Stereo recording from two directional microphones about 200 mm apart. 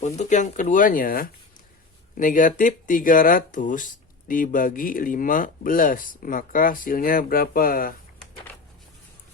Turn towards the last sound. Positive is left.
turn(degrees=45)  # may be behind; listen again after turning